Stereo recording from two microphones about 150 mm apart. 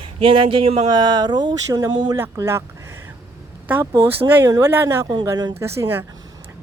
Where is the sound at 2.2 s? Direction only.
15° right (ahead or behind).